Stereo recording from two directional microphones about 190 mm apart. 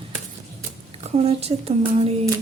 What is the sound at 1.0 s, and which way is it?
Speech, 35° right (ahead or behind).